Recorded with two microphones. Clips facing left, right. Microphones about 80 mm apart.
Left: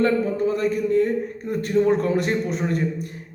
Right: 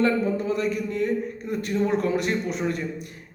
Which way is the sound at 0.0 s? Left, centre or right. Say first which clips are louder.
Left 3 dB; left.